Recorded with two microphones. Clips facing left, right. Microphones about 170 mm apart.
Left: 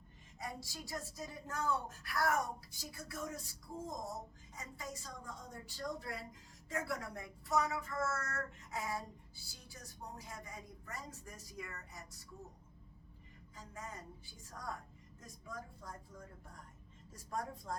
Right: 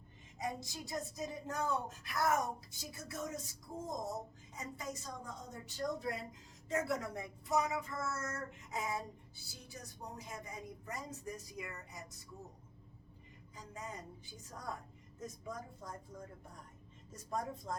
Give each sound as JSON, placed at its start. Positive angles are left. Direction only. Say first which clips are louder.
{"t": 0.3, "sound": "speech", "louder": "right 5 dB", "side_deg": -20}
{"t": 13.6, "sound": "speech", "louder": "right 2 dB", "side_deg": -20}
{"t": 17.1, "sound": "speech", "louder": "right 2 dB", "side_deg": -20}